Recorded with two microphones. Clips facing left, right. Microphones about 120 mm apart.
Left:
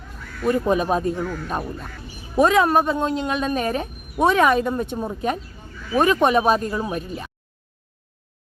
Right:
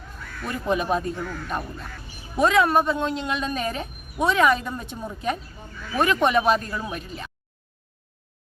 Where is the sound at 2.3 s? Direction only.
40° left (ahead or behind).